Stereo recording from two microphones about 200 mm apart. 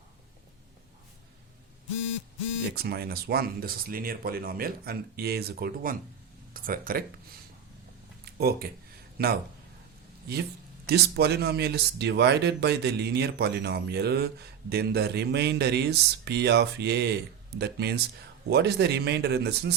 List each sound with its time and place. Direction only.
2.7 s speech: 50° right (ahead or behind)
8.2 s a sound: 50° right (ahead or behind)
9.1 s speech: 50° right (ahead or behind)